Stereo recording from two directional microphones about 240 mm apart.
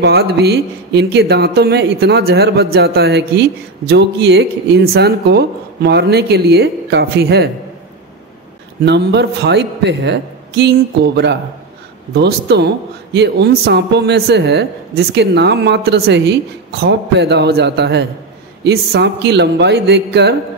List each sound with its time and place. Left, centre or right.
0.0 s a man's voice: right
8.8 s a man's voice: right